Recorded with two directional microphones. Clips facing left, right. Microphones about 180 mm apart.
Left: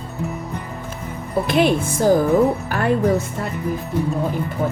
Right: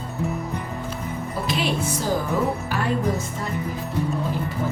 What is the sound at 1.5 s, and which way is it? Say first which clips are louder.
A woman's voice: left 7 dB; 55° left (ahead or behind).